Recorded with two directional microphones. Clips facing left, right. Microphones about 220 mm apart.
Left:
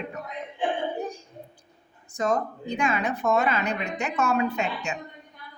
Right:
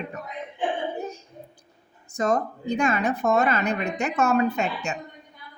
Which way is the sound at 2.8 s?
45° right (ahead or behind).